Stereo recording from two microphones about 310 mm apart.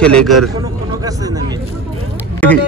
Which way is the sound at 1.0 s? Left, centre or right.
Centre.